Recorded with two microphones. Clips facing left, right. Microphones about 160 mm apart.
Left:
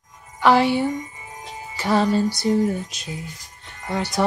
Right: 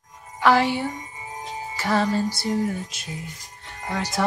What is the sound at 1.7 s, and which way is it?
Music, 15° left (ahead or behind).